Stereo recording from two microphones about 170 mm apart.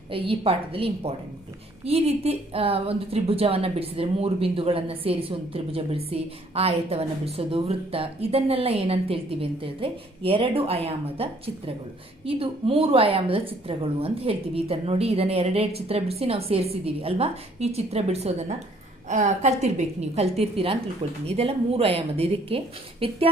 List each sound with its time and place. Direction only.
0.1 s a woman's voice: 35° right (ahead or behind)